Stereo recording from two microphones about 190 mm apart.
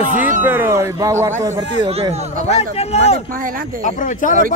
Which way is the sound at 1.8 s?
30° right (ahead or behind).